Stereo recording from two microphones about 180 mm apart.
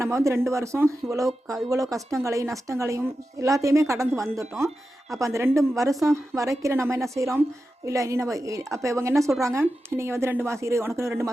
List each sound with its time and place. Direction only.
0.0 s a woman's voice: 15° right (ahead or behind)